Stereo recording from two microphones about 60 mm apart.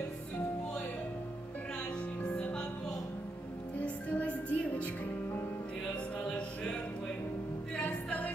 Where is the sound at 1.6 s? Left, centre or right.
Centre; by 5.6 s left.